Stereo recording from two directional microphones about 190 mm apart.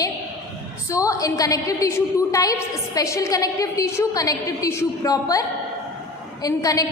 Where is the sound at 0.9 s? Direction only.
15° left (ahead or behind).